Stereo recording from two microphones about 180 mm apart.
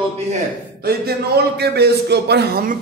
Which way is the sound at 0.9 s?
60° right (ahead or behind).